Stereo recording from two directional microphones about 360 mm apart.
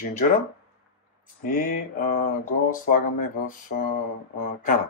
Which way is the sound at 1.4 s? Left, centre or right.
Left.